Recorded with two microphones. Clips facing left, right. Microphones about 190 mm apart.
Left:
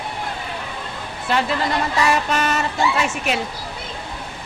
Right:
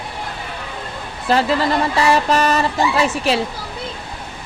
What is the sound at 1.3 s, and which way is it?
A woman's voice, 35° right (ahead or behind).